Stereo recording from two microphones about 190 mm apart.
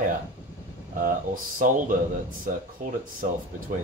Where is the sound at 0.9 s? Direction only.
45° right (ahead or behind).